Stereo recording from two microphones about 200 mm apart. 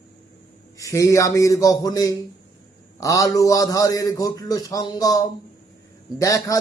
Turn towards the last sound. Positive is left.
turn(degrees=15)  # may be behind; listen again after turning